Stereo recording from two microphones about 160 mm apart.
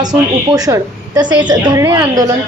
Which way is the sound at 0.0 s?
25° right (ahead or behind).